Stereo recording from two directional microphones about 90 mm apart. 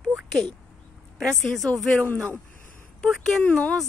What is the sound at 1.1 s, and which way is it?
A woman's voice, 5° left (ahead or behind).